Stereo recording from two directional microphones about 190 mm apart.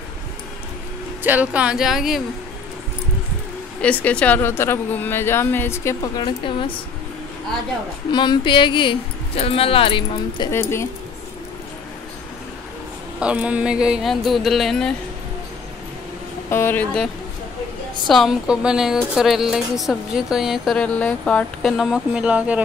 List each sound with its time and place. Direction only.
1.2 s speech: 10° right (ahead or behind)
3.8 s a woman's voice: 5° left (ahead or behind); by 6.5 s 25° left (ahead or behind)
8.1 s speech: 25° left (ahead or behind)
10.5 s a woman's voice: 15° left (ahead or behind)
13.2 s speech: 5° right (ahead or behind)
16.4 s a woman's voice: 10° left (ahead or behind); by 22.6 s 5° right (ahead or behind)